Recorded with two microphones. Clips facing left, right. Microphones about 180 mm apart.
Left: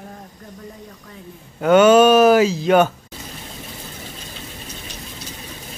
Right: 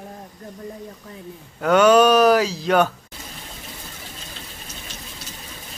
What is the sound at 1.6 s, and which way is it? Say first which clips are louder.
Mantra: left 3 dB; centre (ahead or behind).